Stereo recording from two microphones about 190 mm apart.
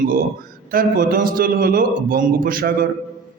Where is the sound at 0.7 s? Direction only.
50° right (ahead or behind).